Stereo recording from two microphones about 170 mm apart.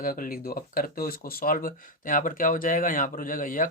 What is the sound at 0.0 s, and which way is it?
Speech, 55° left (ahead or behind).